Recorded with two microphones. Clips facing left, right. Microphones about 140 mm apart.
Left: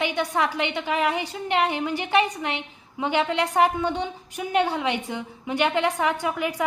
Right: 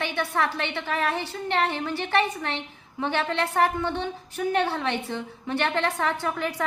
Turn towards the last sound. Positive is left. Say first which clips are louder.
# left 2 dB
turn(degrees=15)  # may be behind; listen again after turning